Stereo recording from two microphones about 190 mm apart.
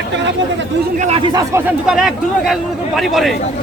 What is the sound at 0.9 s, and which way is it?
Speech, 35° right (ahead or behind).